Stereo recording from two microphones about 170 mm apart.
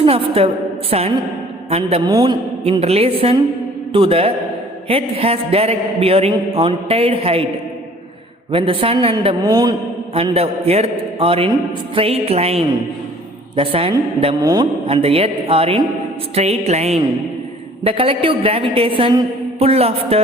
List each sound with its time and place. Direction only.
0.0 s a woman's voice: 35° right (ahead or behind)
8.5 s a man's voice: 30° right (ahead or behind)
9.4 s a man's voice: 20° right (ahead or behind)
10.2 s a man's voice: 35° right (ahead or behind)
14.3 s a man's voice: 20° right (ahead or behind)
14.8 s a man's voice: 35° right (ahead or behind)